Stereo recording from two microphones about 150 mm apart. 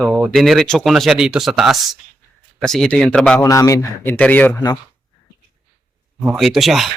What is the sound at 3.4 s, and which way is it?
Speech, 20° left (ahead or behind).